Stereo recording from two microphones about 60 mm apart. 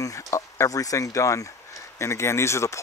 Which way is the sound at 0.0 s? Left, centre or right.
Left.